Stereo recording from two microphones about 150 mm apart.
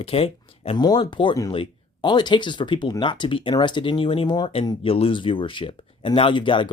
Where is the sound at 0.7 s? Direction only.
30° left (ahead or behind).